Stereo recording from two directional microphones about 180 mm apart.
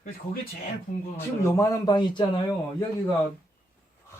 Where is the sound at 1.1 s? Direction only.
15° left (ahead or behind).